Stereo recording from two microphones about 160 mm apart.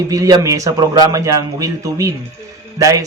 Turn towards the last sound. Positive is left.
turn(degrees=-20)  # may be behind; listen again after turning